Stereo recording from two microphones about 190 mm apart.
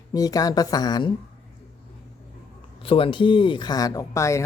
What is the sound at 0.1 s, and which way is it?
Speech, 20° left (ahead or behind).